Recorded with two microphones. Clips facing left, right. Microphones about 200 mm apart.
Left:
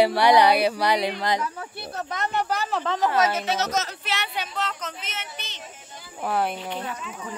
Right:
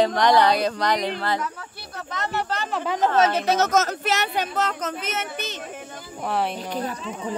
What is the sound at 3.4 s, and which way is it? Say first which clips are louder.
Speech: right 5 dB; 45° right (ahead or behind).